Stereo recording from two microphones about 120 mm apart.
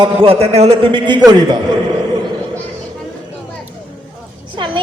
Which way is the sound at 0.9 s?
40° right (ahead or behind).